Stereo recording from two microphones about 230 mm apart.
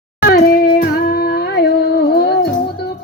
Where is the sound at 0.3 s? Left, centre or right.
Left.